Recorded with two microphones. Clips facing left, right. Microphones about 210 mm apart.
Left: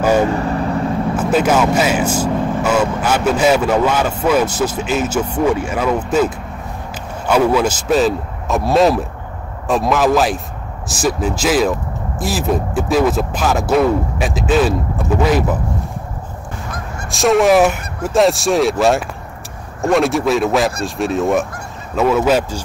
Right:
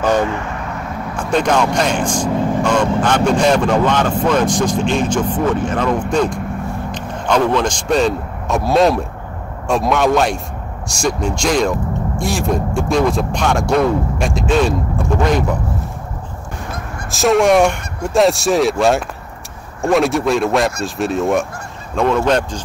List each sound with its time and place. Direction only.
0.0 s vehicle: 10° left (ahead or behind)
0.3 s vehicle: 35° left (ahead or behind)
1.3 s a man's voice: 5° left (ahead or behind)
17.1 s speech: centre (ahead or behind)